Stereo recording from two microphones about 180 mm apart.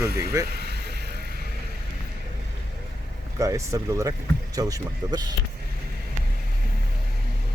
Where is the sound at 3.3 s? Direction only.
20° right (ahead or behind).